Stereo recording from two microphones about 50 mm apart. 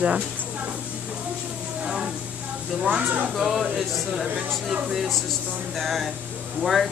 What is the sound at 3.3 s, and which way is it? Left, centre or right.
A woman's voice, centre.